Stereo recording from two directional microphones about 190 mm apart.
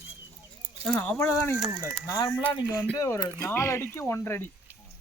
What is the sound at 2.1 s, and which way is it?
Speech, 20° left (ahead or behind).